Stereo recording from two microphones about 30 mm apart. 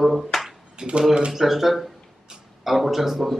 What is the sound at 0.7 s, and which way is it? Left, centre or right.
Speech, right.